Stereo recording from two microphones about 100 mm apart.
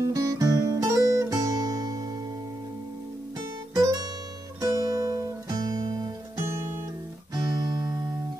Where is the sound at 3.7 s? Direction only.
40° right (ahead or behind).